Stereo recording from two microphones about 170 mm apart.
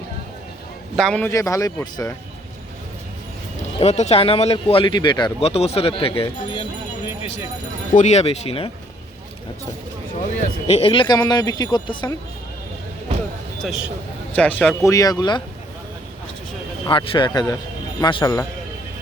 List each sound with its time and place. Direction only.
0.9 s a man's voice: 5° left (ahead or behind)
1.3 s speech: 20° left (ahead or behind)
3.8 s speech: 40° left (ahead or behind)
7.9 s speech: 40° left (ahead or behind)
10.4 s speech: 35° left (ahead or behind)
14.3 s a man's voice: 10° left (ahead or behind)
14.8 s speech: 20° left (ahead or behind)
16.8 s speech: 30° left (ahead or behind)